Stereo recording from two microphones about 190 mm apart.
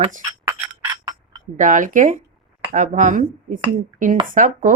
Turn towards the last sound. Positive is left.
turn(degrees=-45)  # may be behind; listen again after turning